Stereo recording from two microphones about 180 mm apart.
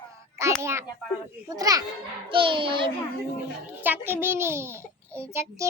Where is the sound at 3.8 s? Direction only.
10° right (ahead or behind).